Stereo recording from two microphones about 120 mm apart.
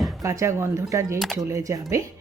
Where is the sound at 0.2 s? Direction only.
25° right (ahead or behind).